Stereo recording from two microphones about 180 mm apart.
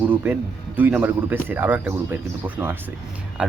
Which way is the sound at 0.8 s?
10° right (ahead or behind).